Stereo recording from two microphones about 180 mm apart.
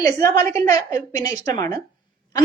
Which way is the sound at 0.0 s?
20° left (ahead or behind).